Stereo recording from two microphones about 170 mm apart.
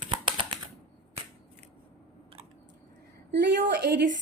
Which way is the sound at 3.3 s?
90° right.